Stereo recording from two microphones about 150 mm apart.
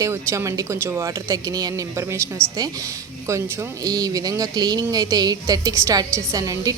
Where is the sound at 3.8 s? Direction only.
25° right (ahead or behind).